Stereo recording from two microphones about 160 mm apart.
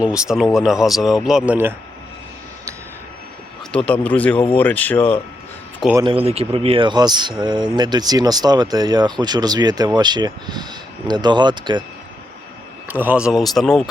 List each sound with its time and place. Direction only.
0.0 s a man's voice: 5° right (ahead or behind)
3.7 s speech: 5° left (ahead or behind)
6.0 s speech: 35° right (ahead or behind)
12.9 s a man's voice: 10° right (ahead or behind)